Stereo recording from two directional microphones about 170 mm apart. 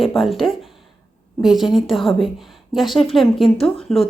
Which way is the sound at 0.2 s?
Centre (ahead or behind).